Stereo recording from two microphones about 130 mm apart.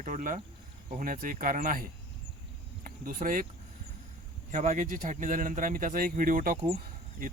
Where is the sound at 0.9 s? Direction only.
90° right.